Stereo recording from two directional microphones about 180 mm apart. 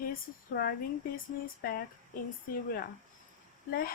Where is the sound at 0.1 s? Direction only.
60° left (ahead or behind).